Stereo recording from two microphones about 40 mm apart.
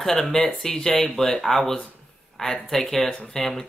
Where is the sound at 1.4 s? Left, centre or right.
Centre.